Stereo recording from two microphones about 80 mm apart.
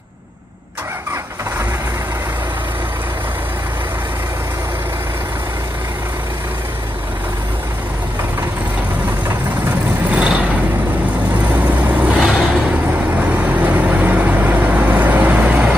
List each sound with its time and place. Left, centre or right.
10.1 s vehicle: centre
12.2 s vehicle: centre
13.2 s vehicle: centre